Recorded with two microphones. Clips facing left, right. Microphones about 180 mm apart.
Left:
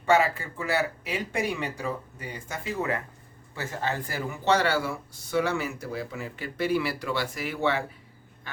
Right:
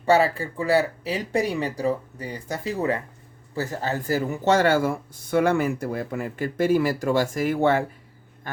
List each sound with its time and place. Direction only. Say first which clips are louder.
0.0 s speech: right 3 dB; 35° right (ahead or behind)